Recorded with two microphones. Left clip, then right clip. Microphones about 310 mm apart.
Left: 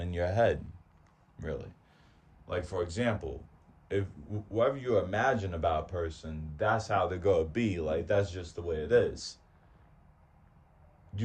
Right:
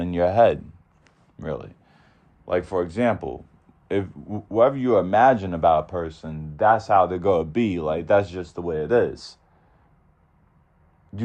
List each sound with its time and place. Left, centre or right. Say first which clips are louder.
0.0 s speech: right 11 dB; centre